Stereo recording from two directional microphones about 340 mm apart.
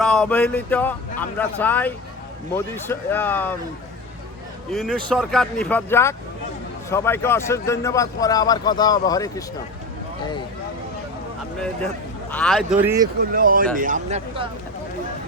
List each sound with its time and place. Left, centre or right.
0.0 s a man's voice: centre
4.7 s a man's voice: centre
12.3 s speech: centre
13.3 s speech: right